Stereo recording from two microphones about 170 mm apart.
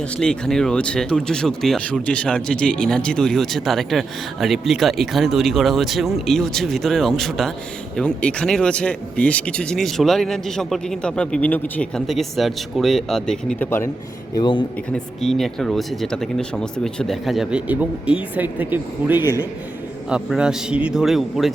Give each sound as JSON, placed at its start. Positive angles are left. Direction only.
{"t": 0.2, "sound": "speech", "side_deg": 5}
{"t": 13.7, "sound": "speech", "side_deg": 15}
{"t": 14.3, "sound": "speech", "side_deg": 30}
{"t": 14.9, "sound": "speech", "side_deg": 0}